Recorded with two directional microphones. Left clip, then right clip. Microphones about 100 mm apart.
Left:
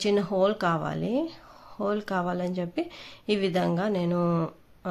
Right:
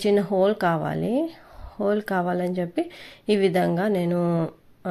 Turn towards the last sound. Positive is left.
turn(degrees=-15)  # may be behind; listen again after turning